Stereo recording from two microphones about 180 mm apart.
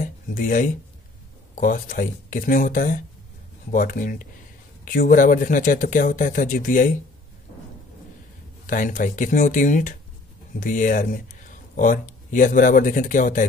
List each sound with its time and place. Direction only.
0.0 s a sound: 50° left (ahead or behind)
1.5 s speech: 45° left (ahead or behind)
8.6 s speech: 50° left (ahead or behind)